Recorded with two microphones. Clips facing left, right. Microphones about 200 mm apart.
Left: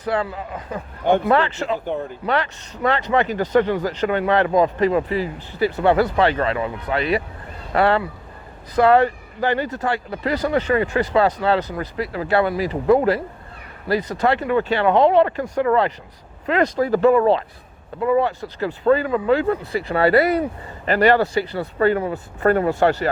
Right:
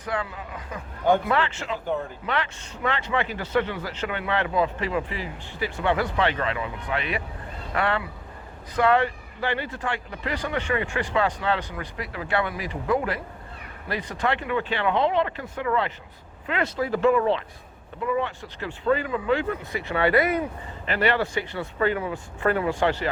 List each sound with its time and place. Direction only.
0.0 s speech: 35° left (ahead or behind)